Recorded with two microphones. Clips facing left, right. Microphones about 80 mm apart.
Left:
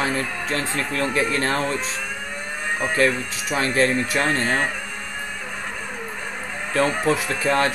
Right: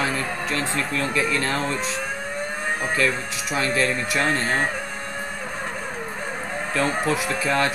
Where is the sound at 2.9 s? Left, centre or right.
Left.